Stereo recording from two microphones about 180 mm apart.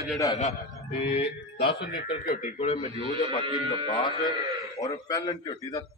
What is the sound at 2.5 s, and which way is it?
Speech, 35° left (ahead or behind).